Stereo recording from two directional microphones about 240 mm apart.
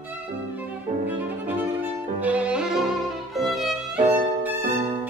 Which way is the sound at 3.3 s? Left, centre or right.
Centre.